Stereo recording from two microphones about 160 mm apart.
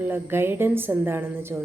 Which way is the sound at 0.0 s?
15° right (ahead or behind).